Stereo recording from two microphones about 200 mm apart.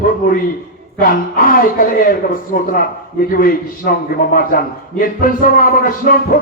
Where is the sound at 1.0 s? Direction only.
45° left (ahead or behind).